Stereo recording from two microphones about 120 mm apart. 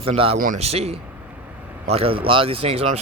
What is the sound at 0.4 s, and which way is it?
A man's voice, 75° right (ahead or behind).